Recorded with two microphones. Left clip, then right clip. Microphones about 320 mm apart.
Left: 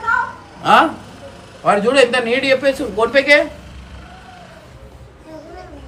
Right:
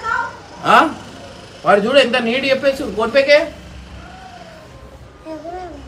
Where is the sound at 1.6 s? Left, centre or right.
Left.